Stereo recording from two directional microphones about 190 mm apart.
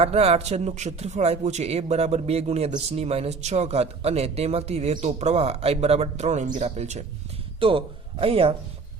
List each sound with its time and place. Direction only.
0.0 s speech: 30° right (ahead or behind)